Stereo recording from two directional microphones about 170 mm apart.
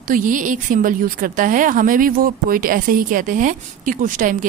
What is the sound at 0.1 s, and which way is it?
A woman's voice, 50° right (ahead or behind).